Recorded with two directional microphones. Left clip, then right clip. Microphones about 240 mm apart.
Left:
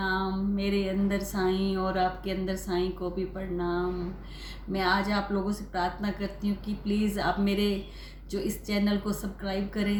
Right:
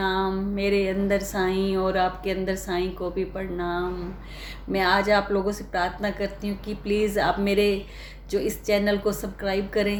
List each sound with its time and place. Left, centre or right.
0.0 s music: right
3.3 s a woman's voice: right